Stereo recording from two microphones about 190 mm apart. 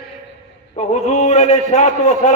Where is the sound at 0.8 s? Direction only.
35° left (ahead or behind).